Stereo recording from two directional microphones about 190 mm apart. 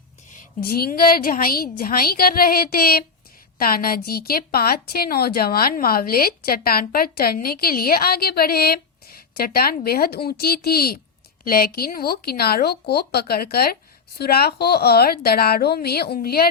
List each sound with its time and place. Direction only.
0.3 s a woman's voice: 45° left (ahead or behind)